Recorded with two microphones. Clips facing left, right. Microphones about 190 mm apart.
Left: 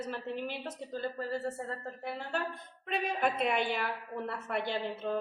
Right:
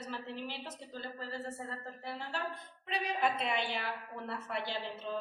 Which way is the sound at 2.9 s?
50° left (ahead or behind).